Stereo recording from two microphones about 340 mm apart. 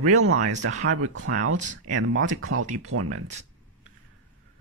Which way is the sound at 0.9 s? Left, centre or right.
Right.